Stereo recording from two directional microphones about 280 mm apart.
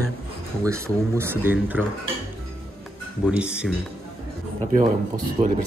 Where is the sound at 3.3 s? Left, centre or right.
Centre.